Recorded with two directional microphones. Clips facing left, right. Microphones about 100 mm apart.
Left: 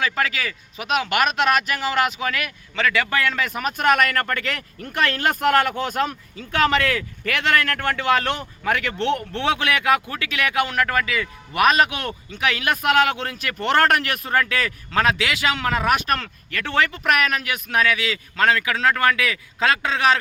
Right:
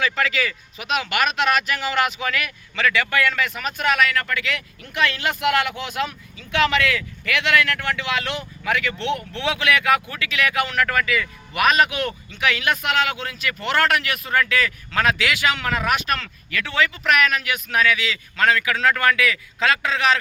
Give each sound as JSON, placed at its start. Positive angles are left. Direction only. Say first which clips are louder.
{"t": 0.4, "sound": "speech", "louder": "even", "side_deg": 40}